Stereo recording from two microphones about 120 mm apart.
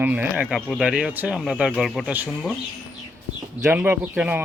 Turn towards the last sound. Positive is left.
turn(degrees=-15)  # may be behind; listen again after turning